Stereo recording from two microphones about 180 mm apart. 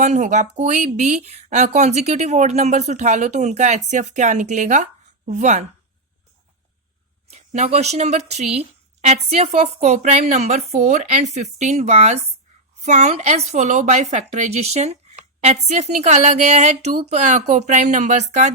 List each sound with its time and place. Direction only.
0.0 s speech: 40° right (ahead or behind)
7.3 s speech: 40° right (ahead or behind)